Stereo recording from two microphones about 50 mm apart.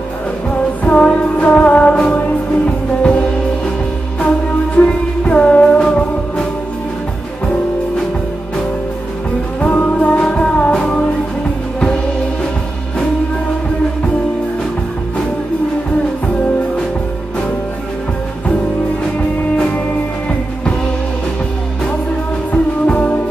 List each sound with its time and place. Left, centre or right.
0.8 s music: left
4.7 s music: left
9.6 s music: left
22.5 s music: left